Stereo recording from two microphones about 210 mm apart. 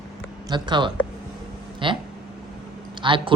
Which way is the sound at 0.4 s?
20° right (ahead or behind).